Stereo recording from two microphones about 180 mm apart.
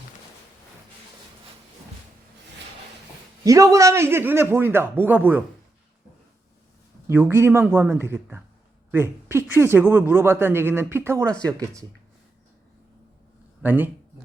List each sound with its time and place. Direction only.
3.4 s speech: 20° right (ahead or behind)
7.1 s speech: 10° right (ahead or behind)
13.6 s speech: 10° right (ahead or behind)